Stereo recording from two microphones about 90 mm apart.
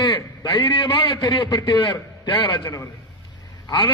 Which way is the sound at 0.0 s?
55° left (ahead or behind).